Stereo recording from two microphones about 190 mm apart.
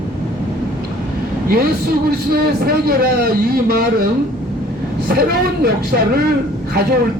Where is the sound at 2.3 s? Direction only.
55° right (ahead or behind).